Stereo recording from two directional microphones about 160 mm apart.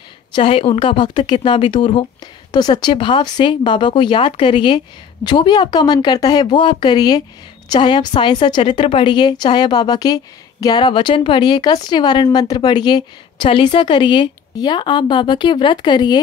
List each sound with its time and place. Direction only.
0.3 s a woman's voice: 35° left (ahead or behind)